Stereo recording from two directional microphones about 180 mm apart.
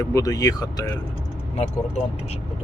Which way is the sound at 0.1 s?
20° left (ahead or behind).